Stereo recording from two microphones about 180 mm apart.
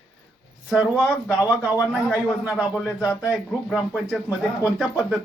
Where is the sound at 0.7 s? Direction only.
5° right (ahead or behind).